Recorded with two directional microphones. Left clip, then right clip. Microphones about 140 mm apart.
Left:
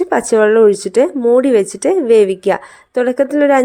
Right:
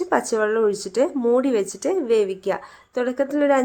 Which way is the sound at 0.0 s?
45° left (ahead or behind).